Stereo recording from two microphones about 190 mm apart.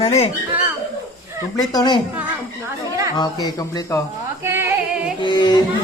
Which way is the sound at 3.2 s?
20° left (ahead or behind).